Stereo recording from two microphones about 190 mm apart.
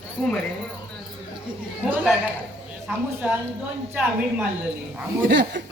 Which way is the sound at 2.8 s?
5° right (ahead or behind).